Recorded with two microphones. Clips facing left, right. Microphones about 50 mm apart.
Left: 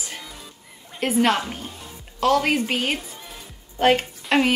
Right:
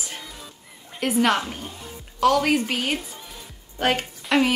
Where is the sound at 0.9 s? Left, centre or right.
Centre.